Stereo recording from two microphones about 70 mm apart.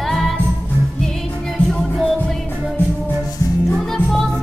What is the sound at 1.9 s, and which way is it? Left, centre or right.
Music, centre.